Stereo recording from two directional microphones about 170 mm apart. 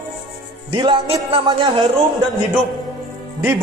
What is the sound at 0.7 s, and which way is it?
A man's voice, 30° right (ahead or behind).